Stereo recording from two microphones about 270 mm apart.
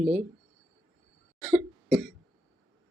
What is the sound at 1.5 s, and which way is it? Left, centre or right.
Cough, centre.